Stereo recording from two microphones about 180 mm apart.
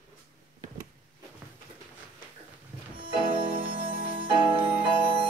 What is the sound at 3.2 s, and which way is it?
Music, 30° right (ahead or behind).